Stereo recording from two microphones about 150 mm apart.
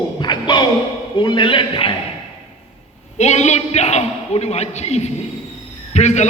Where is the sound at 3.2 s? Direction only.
50° left (ahead or behind).